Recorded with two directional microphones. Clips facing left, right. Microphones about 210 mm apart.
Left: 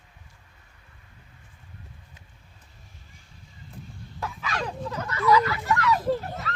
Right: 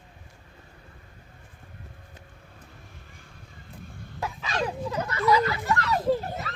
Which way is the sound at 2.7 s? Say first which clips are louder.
Right 5 dB; 60° right (ahead or behind).